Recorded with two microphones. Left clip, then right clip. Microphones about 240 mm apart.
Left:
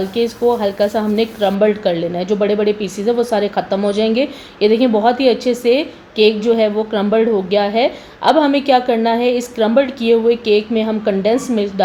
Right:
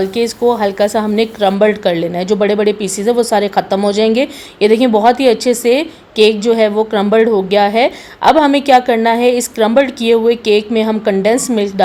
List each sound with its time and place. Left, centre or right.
0.1 s speech: right